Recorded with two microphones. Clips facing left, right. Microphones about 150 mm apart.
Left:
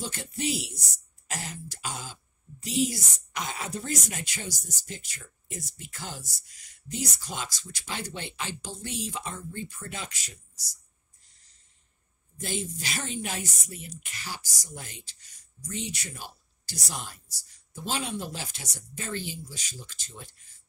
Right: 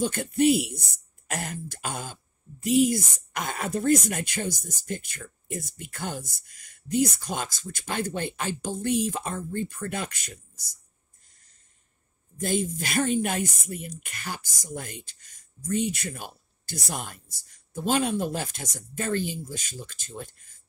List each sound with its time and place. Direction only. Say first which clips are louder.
0.0 s speech: right 11 dB; 55° right (ahead or behind)
12.4 s speech: right 7 dB; 50° right (ahead or behind)